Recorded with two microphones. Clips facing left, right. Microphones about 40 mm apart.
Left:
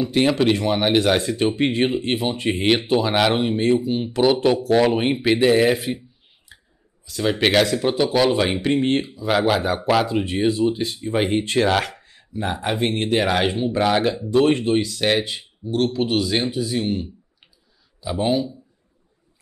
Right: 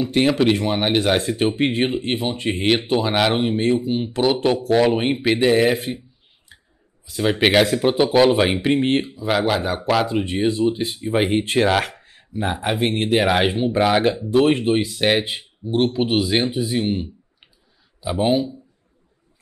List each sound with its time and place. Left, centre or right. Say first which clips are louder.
0.0 s speech: right 1 dB; centre
2.0 s speech: left 1 dB; centre
6.5 s a sound: left 1 dB; centre
7.1 s speech: right 2 dB; centre
9.3 s speech: left 1 dB; centre